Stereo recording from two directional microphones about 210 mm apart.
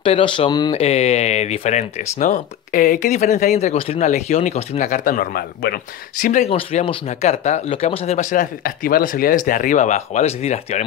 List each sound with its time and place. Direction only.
0.0 s speech: 25° left (ahead or behind); by 5.8 s 45° left (ahead or behind)
6.2 s speech: 35° left (ahead or behind)